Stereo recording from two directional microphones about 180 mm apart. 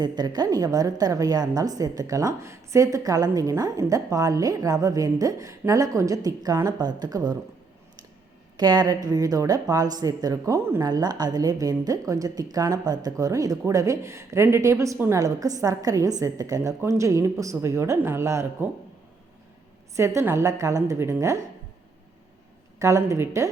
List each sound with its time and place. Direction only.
0.0 s a woman's voice: 20° right (ahead or behind)
8.5 s a woman's voice: 25° right (ahead or behind)
20.0 s a woman's voice: 15° right (ahead or behind)
22.8 s a woman's voice: 15° right (ahead or behind)